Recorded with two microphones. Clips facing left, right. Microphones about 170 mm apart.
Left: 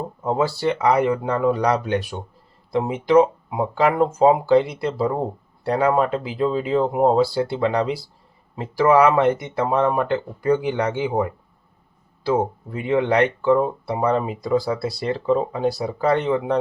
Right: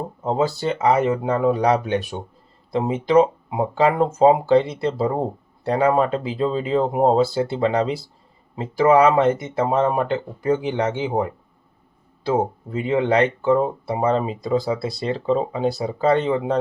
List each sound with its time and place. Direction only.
0.4 s speech: 20° right (ahead or behind)